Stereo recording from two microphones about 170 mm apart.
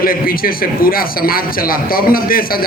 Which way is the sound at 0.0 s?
60° left (ahead or behind).